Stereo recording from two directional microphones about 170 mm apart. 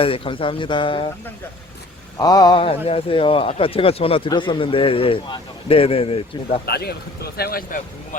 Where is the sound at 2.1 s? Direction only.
25° left (ahead or behind).